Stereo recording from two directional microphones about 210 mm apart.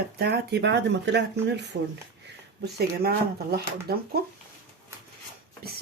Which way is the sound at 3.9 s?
50° right (ahead or behind).